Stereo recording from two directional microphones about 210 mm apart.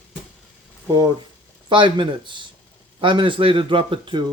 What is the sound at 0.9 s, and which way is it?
Speech, 20° right (ahead or behind).